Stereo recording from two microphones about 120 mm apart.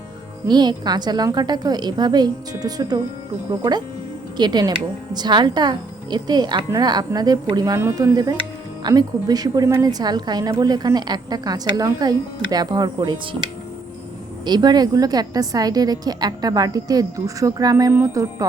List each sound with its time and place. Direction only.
0.4 s a woman's voice: 35° right (ahead or behind)
14.4 s a woman's voice: 35° right (ahead or behind)